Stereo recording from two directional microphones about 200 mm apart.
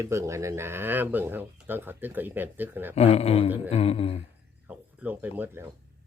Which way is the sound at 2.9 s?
30° left (ahead or behind).